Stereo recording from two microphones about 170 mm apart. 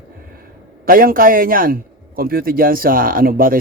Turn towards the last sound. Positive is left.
turn(degrees=-55)  # may be behind; listen again after turning